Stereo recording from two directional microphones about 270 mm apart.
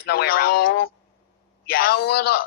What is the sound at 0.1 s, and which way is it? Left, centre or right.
A man's voice, left.